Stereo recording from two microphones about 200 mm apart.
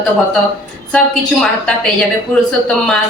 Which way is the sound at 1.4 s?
5° left (ahead or behind).